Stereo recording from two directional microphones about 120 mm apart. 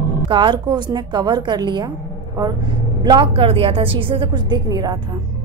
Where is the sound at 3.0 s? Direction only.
45° right (ahead or behind).